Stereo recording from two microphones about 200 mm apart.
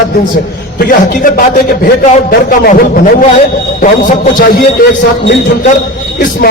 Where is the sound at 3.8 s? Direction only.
40° left (ahead or behind).